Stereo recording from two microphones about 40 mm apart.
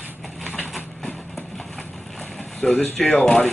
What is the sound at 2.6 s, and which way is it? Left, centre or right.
Speech, centre.